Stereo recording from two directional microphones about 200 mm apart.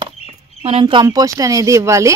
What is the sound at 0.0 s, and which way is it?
Speech, 30° right (ahead or behind).